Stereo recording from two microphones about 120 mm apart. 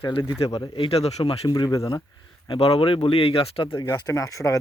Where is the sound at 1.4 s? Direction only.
30° left (ahead or behind).